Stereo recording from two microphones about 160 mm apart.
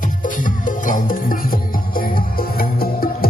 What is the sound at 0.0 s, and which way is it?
Music, 55° left (ahead or behind).